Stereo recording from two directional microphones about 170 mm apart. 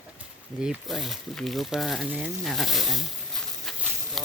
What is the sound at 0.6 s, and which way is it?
Speech, centre (ahead or behind).